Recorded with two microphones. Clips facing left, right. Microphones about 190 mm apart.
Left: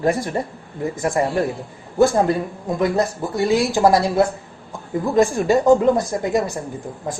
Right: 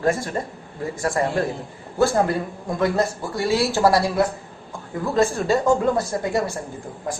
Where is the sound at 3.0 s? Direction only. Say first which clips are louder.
Left 3 dB; 20° left (ahead or behind).